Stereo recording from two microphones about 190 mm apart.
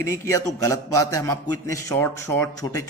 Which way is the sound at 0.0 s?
15° left (ahead or behind).